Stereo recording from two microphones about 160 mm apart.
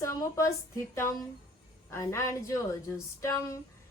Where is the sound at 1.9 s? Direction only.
15° left (ahead or behind).